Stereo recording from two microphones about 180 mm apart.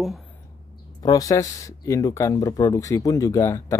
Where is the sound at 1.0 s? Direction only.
20° left (ahead or behind).